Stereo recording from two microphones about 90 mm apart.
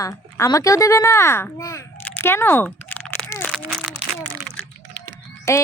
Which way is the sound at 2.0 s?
25° left (ahead or behind).